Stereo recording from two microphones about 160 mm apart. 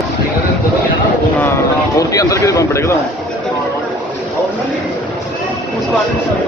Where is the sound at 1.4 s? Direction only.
15° left (ahead or behind).